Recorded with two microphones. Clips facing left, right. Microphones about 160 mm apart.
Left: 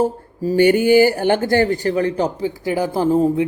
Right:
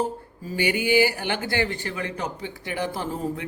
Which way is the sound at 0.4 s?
45° left (ahead or behind).